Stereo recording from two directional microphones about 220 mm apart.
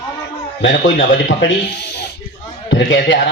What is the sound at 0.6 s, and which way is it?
Speech, 55° left (ahead or behind).